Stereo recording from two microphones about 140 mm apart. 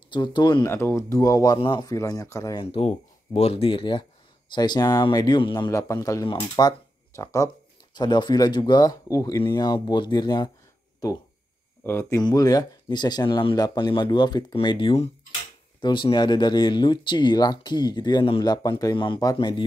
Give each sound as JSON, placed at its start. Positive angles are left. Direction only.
{"t": 0.1, "sound": "speech", "side_deg": 35}
{"t": 0.7, "sound": "speech", "side_deg": 15}
{"t": 2.5, "sound": "speech", "side_deg": 40}
{"t": 7.9, "sound": "speech", "side_deg": 30}
{"t": 12.2, "sound": "speech", "side_deg": 30}